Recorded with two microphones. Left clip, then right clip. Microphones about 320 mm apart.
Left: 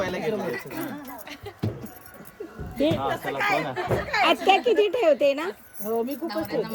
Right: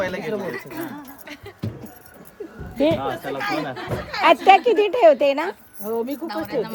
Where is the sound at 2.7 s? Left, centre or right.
Centre.